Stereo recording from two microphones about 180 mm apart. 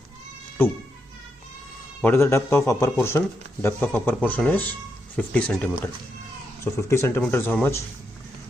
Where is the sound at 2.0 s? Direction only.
10° left (ahead or behind).